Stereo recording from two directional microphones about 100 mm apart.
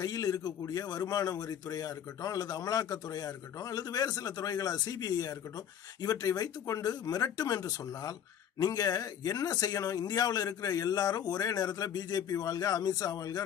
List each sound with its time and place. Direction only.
0.0 s speech: 40° left (ahead or behind)